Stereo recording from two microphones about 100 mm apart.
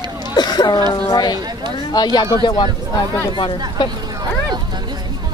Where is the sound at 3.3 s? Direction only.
55° left (ahead or behind).